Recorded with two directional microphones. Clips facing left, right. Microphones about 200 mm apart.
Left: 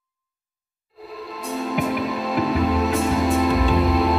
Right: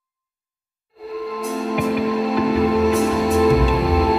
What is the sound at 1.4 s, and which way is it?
Music, centre (ahead or behind).